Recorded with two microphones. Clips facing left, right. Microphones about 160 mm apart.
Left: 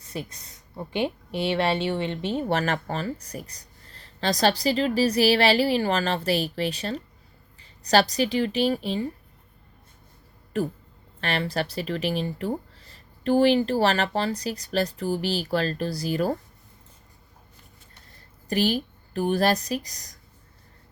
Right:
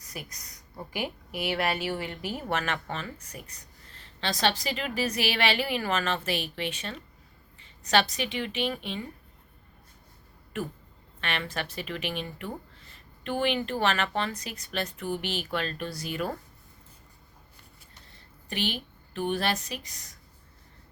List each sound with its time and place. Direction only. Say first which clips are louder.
0.0 s speech: left 7 dB; 30° left (ahead or behind)
10.5 s speech: left 7 dB; 35° left (ahead or behind)
18.4 s a woman's voice: left 9 dB; 40° left (ahead or behind)